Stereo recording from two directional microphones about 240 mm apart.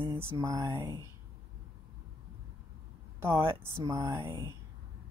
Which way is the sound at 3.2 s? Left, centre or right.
Centre.